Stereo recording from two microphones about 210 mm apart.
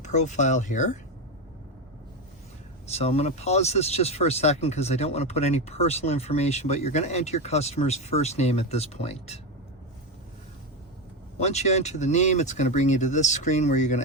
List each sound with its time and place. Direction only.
0.0 s speech: 35° left (ahead or behind)
2.9 s speech: 30° left (ahead or behind)
11.3 s speech: 30° left (ahead or behind)